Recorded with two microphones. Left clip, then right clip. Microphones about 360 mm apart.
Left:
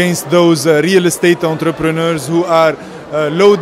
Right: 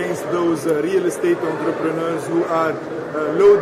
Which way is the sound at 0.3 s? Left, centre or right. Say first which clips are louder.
Left 10 dB; left.